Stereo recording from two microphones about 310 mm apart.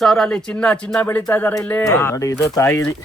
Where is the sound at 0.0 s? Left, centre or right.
Centre.